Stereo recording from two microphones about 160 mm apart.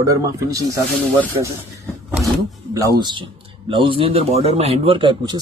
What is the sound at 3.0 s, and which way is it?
Speech, 30° right (ahead or behind).